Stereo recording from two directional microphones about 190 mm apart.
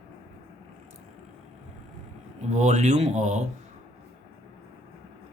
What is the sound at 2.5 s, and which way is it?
Speech, 40° right (ahead or behind).